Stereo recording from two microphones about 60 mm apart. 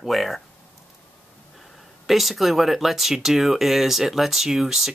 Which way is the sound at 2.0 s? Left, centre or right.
Centre.